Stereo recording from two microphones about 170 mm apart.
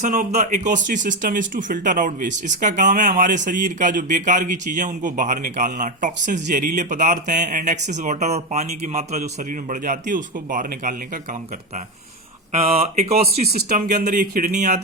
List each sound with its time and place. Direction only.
0.0 s speech: 45° right (ahead or behind)
12.5 s speech: 40° right (ahead or behind)
13.6 s speech: 65° right (ahead or behind)